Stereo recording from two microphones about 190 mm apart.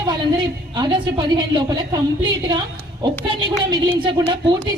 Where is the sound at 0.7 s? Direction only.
25° right (ahead or behind).